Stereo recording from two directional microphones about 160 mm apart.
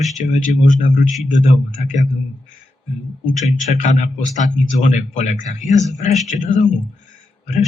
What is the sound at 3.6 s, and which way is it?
Speech, 50° left (ahead or behind).